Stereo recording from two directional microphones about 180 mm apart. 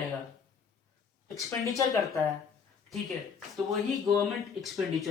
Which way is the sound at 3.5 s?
Centre (ahead or behind).